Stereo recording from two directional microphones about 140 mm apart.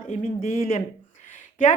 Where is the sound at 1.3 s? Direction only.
65° left (ahead or behind).